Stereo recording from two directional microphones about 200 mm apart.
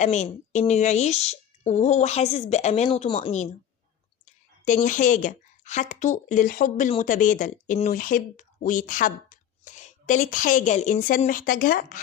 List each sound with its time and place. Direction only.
0.0 s speech: 35° left (ahead or behind)
4.6 s speech: 40° left (ahead or behind)